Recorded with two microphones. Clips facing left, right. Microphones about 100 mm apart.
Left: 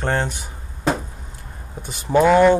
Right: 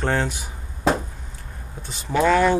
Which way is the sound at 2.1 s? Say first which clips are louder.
Left 4 dB; 20° left (ahead or behind).